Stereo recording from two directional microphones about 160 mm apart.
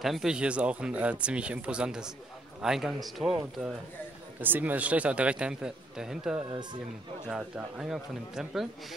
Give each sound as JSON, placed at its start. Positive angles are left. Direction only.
{"t": 0.0, "sound": "speech", "side_deg": 0}
{"t": 4.4, "sound": "speech", "side_deg": -10}
{"t": 6.5, "sound": "speech", "side_deg": -30}
{"t": 7.2, "sound": "speech", "side_deg": -5}